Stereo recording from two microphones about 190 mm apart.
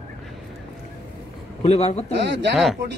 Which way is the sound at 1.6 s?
35° left (ahead or behind).